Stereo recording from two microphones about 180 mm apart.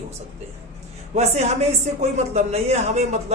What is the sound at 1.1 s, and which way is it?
Speech, 35° right (ahead or behind).